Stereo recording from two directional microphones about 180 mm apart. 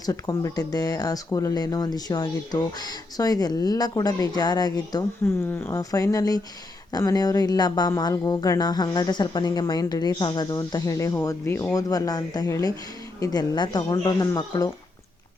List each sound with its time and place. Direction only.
0.0 s speech: 20° left (ahead or behind)
5.2 s speech: 10° left (ahead or behind)